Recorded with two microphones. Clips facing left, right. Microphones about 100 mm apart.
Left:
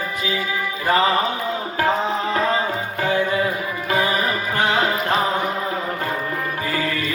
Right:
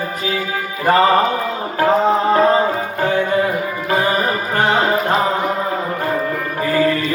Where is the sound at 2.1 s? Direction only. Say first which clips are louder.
Right 7 dB; 40° right (ahead or behind).